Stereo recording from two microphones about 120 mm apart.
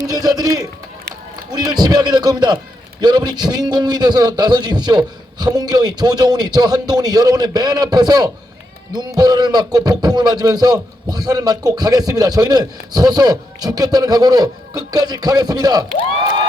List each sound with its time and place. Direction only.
0.0 s speech: 30° right (ahead or behind)